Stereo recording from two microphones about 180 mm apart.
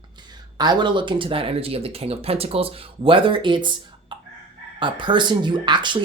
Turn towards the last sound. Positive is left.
turn(degrees=-25)  # may be behind; listen again after turning